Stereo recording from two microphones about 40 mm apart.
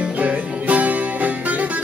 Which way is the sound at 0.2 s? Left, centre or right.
Right.